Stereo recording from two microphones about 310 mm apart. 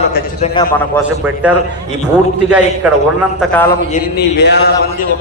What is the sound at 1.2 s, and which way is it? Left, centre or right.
Speech, centre.